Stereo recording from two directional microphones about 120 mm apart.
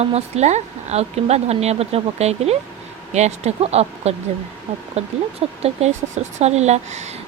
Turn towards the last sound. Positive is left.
turn(degrees=-70)  # may be behind; listen again after turning